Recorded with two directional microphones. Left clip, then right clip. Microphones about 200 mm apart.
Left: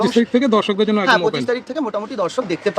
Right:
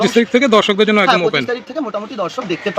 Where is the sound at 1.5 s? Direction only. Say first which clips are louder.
Even; 15° left (ahead or behind).